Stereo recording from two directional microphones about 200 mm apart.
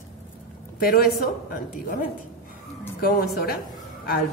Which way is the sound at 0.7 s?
45° left (ahead or behind).